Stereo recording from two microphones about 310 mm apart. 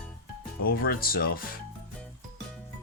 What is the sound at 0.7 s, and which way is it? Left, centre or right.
Speech, left.